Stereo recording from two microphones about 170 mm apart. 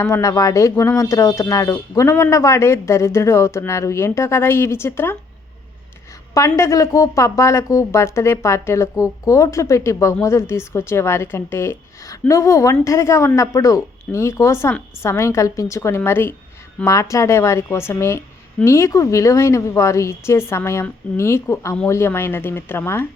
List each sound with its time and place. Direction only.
0.0 s speech: 20° left (ahead or behind)
6.6 s speech: 15° left (ahead or behind)